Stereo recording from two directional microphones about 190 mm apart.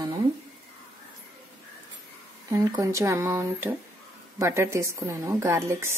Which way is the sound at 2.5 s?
15° right (ahead or behind).